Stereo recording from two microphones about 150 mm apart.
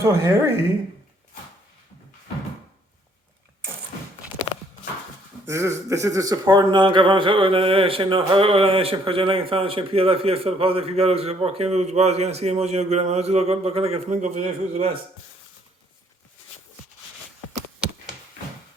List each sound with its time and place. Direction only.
0.0 s a woman's voice: 20° right (ahead or behind)
5.5 s speech: 20° right (ahead or behind); by 14.8 s 45° right (ahead or behind)